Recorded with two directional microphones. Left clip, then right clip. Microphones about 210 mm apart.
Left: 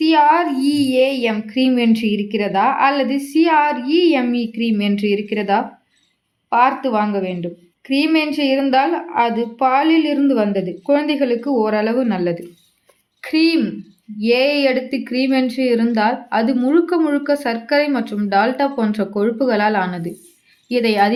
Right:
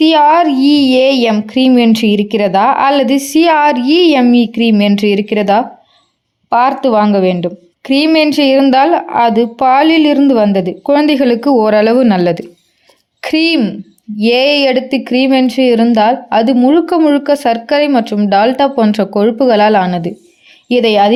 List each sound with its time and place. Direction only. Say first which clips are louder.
0.0 s a woman's voice: right 6 dB; 45° right (ahead or behind)